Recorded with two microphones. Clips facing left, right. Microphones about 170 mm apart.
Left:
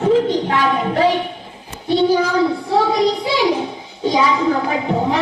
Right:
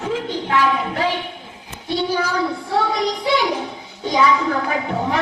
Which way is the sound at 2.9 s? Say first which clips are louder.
Left 3 dB; 30° left (ahead or behind).